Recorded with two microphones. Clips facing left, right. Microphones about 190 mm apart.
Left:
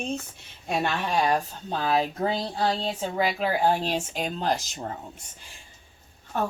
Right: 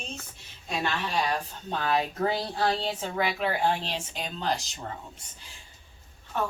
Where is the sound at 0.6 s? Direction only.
55° left (ahead or behind).